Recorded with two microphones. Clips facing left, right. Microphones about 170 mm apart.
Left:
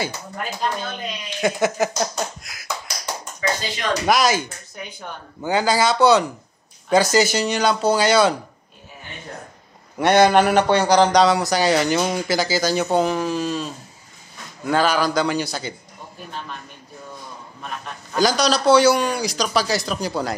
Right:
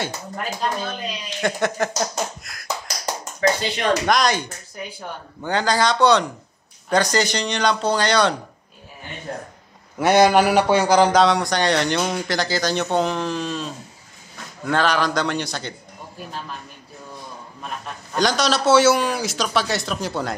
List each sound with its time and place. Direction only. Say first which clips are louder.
1.4 s speech: left 2 dB; 5° left (ahead or behind)
3.3 s speech: right 5 dB; 60° right (ahead or behind)
4.0 s speech: left 1 dB; 5° left (ahead or behind)
9.9 s speech: even; 5° right (ahead or behind)
18.1 s speech: left 2 dB; centre (ahead or behind)